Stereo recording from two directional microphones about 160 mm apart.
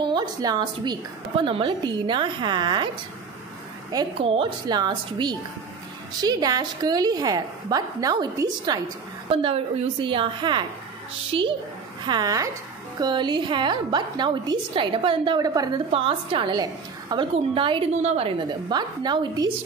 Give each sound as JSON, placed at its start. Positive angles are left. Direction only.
{"t": 0.0, "sound": "a woman's voice", "side_deg": -30}
{"t": 3.9, "sound": "a woman's voice", "side_deg": -25}
{"t": 9.3, "sound": "a woman's voice", "side_deg": -35}
{"t": 15.9, "sound": "a woman's voice", "side_deg": -35}